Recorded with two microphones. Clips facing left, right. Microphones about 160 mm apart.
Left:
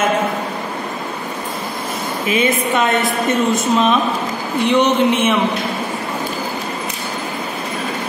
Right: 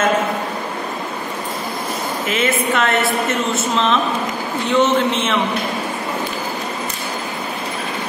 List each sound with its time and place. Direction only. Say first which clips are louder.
2.2 s a woman's voice: left 3 dB; 15° left (ahead or behind)